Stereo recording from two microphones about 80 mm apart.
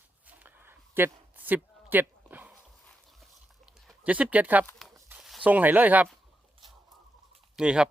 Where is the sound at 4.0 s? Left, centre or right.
Centre.